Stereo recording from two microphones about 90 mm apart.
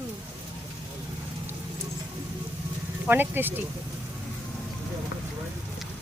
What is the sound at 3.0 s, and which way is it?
Speech, 20° right (ahead or behind).